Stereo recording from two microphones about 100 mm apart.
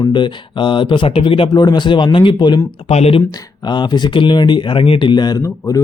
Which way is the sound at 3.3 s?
45° left (ahead or behind).